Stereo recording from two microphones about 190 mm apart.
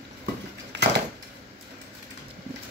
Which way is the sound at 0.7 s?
65° right (ahead or behind).